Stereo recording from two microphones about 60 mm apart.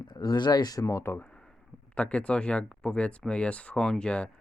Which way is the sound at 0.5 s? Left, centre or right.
Left.